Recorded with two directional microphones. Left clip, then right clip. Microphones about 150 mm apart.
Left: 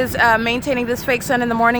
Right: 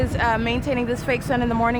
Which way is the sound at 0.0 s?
30° left (ahead or behind).